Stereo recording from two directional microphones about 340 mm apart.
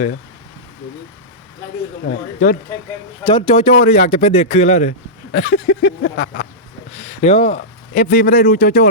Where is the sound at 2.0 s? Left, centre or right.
Left.